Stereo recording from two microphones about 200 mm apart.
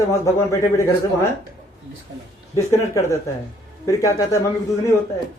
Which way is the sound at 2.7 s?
15° left (ahead or behind).